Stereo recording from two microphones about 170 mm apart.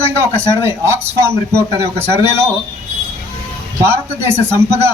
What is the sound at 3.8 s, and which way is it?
A man's voice, 15° right (ahead or behind).